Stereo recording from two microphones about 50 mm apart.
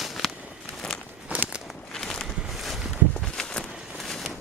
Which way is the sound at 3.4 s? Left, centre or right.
Centre.